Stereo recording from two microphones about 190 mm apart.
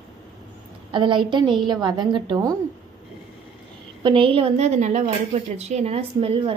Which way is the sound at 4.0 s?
25° right (ahead or behind).